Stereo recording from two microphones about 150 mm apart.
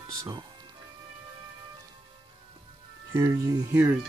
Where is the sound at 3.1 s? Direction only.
20° right (ahead or behind).